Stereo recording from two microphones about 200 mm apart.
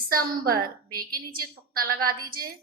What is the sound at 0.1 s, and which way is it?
A woman's voice, 45° right (ahead or behind).